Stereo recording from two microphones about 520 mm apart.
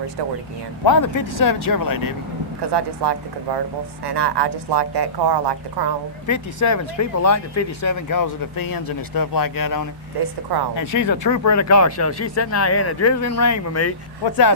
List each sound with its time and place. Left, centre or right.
0.9 s speech: left
2.6 s speech: right
6.2 s speech: left